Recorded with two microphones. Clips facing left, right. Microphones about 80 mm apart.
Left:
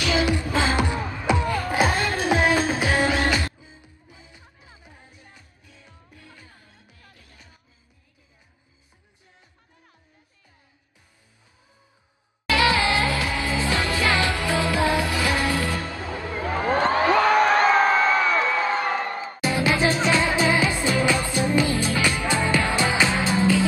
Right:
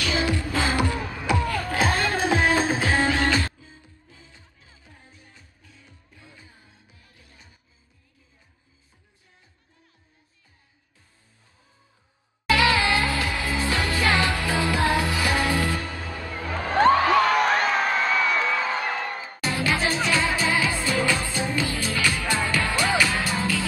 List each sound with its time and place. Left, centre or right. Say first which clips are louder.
0.0 s music: left 3 dB; centre
2.5 s music: even; right
2.8 s music: left 1 dB; centre
6.1 s music: left 1 dB; right
12.4 s music: even; left
17.1 s a sound: left 2 dB; left
19.2 s music: left 4 dB; centre